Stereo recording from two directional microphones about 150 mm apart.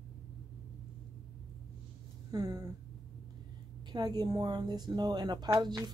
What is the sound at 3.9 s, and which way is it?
Speech, 25° right (ahead or behind).